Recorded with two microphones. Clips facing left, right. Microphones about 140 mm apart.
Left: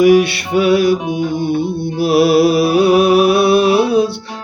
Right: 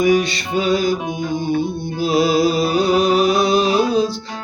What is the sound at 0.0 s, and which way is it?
Music, 65° left (ahead or behind).